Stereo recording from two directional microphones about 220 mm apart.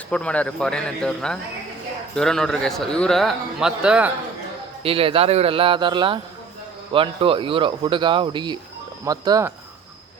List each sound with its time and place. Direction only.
0.1 s a man's voice: 5° left (ahead or behind)
4.8 s speech: 25° right (ahead or behind)